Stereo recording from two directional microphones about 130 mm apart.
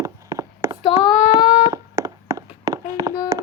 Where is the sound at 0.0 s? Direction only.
25° right (ahead or behind).